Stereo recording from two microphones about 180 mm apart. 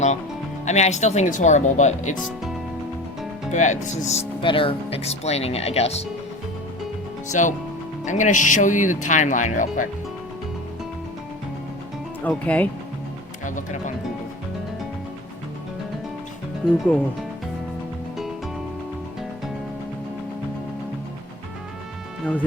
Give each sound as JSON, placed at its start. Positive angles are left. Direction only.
{"t": 0.6, "sound": "speech", "side_deg": 40}
{"t": 2.2, "sound": "speech", "side_deg": 0}
{"t": 3.5, "sound": "speech", "side_deg": 45}
{"t": 7.3, "sound": "speech", "side_deg": 45}
{"t": 12.2, "sound": "speech", "side_deg": 10}
{"t": 13.4, "sound": "speech", "side_deg": 45}
{"t": 16.6, "sound": "speech", "side_deg": -5}